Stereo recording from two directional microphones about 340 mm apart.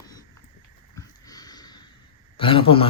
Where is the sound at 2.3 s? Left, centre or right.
Centre.